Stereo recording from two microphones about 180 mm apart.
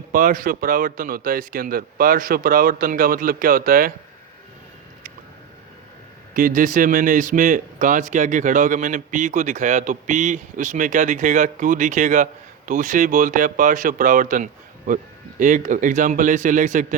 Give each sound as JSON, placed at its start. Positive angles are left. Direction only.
{"t": 0.1, "sound": "speech", "side_deg": -50}
{"t": 6.3, "sound": "speech", "side_deg": -50}